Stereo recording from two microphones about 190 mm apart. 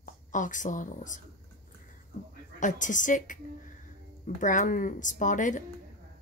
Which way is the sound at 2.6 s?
40° left (ahead or behind).